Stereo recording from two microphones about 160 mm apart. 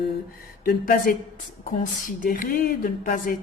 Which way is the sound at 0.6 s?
60° left (ahead or behind).